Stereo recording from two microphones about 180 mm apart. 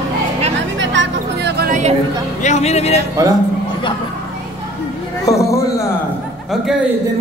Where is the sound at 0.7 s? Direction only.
80° right.